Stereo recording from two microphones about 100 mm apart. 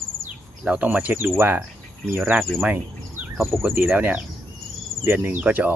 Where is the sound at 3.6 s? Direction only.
20° right (ahead or behind).